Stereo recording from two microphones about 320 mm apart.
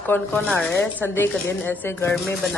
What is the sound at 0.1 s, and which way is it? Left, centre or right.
Speech, centre.